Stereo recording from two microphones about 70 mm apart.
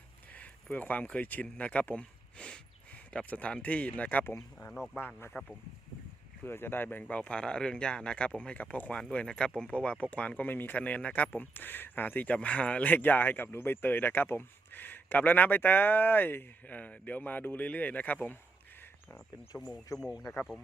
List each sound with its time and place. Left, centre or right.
0.3 s speech: left
6.4 s speech: left
19.5 s speech: left
19.9 s speech: left